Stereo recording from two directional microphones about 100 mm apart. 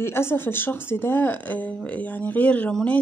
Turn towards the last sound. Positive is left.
turn(degrees=15)  # may be behind; listen again after turning